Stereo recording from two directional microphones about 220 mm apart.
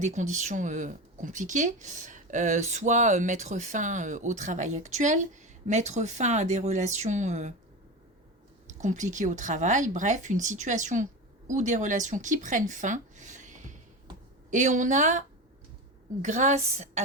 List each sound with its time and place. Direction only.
0.0 s speech: 35° right (ahead or behind)
8.6 s speech: 35° right (ahead or behind)
16.2 s speech: 35° right (ahead or behind)